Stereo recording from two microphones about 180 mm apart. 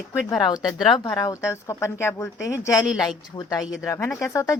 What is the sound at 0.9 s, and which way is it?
Speech, 20° left (ahead or behind).